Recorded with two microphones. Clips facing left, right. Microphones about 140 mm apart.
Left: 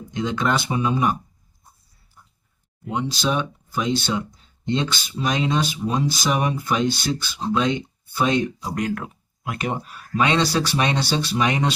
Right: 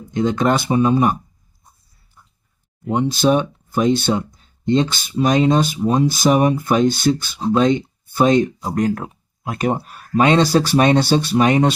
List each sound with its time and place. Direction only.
0.1 s speech: 45° right (ahead or behind)
2.9 s speech: 50° right (ahead or behind); by 9.6 s 35° right (ahead or behind)
9.6 s speech: 50° right (ahead or behind)